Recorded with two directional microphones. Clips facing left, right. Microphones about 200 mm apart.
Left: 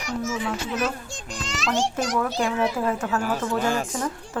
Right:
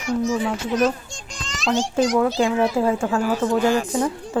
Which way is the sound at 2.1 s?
25° right (ahead or behind).